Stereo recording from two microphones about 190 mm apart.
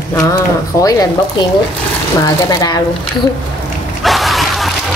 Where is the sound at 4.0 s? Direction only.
Centre (ahead or behind).